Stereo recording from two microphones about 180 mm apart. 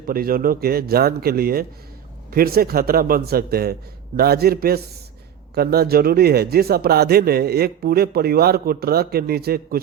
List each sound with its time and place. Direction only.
0.0 s speech: 55° right (ahead or behind)